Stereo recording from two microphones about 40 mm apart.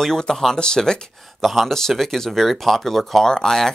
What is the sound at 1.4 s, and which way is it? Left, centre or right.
Speech, centre.